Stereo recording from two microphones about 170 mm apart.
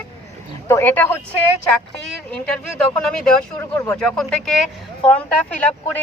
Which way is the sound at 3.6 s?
15° left (ahead or behind).